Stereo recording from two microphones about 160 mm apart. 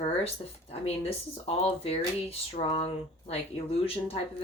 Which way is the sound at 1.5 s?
40° left (ahead or behind).